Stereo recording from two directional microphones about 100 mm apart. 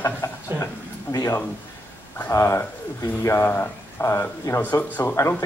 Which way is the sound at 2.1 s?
25° left (ahead or behind).